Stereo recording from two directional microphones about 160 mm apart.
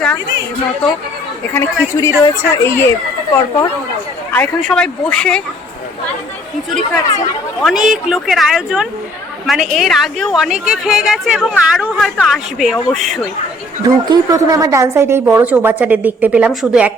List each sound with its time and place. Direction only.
1.5 s a woman's voice: 20° left (ahead or behind)
4.3 s a woman's voice: 5° left (ahead or behind)
6.7 s a woman's voice: 5° left (ahead or behind)
13.8 s a woman's voice: 25° right (ahead or behind); by 16.9 s 10° right (ahead or behind)